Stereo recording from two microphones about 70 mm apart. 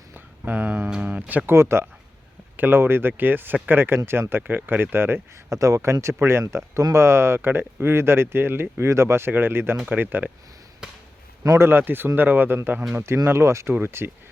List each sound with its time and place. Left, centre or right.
0.1 s a sound: right
1.5 s speech: right
5.5 s speech: right
11.4 s speech: right